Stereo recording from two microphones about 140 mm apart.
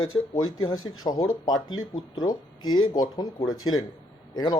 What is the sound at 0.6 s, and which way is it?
Speech, 30° left (ahead or behind).